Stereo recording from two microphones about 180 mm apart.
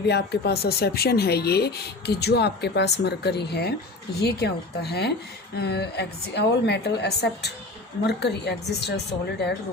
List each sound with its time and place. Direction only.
0.0 s a woman's voice: 70° left (ahead or behind)